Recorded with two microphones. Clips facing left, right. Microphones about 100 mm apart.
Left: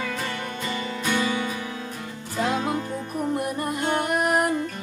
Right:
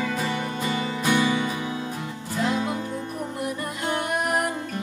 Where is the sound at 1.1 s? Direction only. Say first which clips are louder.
Right 3 dB; 10° right (ahead or behind).